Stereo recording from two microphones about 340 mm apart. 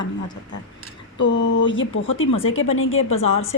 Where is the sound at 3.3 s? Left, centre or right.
Left.